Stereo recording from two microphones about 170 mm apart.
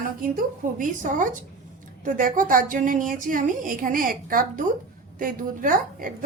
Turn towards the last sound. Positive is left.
turn(degrees=-50)  # may be behind; listen again after turning